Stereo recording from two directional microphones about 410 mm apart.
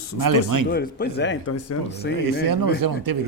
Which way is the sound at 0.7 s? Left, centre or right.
Left.